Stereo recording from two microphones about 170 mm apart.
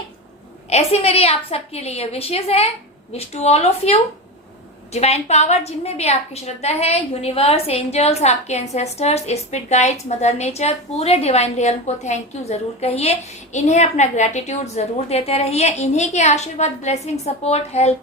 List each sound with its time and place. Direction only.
0.7 s a woman's voice: 35° left (ahead or behind)